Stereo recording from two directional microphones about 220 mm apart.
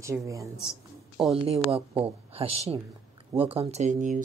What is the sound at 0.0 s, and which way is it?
A woman's voice, 15° right (ahead or behind).